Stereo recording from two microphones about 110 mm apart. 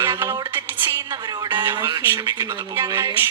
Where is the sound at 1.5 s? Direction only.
15° right (ahead or behind).